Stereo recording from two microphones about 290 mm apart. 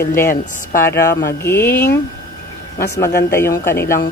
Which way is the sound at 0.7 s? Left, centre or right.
Centre.